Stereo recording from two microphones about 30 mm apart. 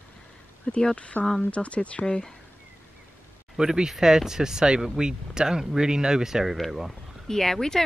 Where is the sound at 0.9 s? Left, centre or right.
Left.